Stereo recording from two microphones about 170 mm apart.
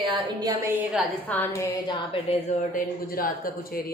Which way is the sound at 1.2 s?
10° left (ahead or behind).